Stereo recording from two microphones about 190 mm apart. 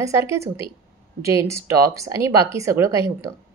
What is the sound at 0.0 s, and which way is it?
Speech, 15° right (ahead or behind).